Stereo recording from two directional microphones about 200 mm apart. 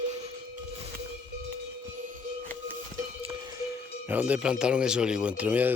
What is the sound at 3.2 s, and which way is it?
Speech, 15° right (ahead or behind).